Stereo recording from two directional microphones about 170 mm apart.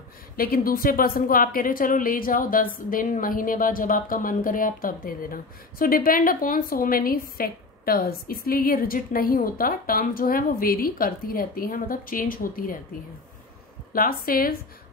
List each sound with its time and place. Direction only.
0.4 s a woman's voice: 60° left (ahead or behind)
13.9 s a woman's voice: 60° left (ahead or behind)